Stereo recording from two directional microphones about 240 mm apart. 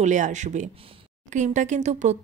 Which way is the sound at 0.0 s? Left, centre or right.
Right.